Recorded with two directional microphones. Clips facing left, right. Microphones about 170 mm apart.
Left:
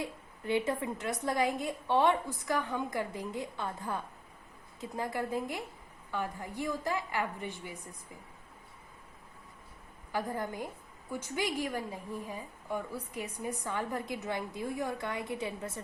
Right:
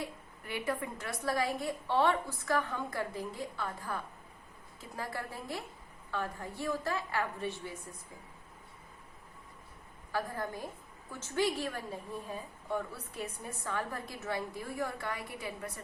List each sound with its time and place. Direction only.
0.0 s a woman's voice: 25° left (ahead or behind)
10.1 s a woman's voice: 20° left (ahead or behind)